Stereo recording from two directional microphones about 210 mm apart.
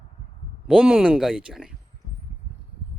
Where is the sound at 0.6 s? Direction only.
5° right (ahead or behind).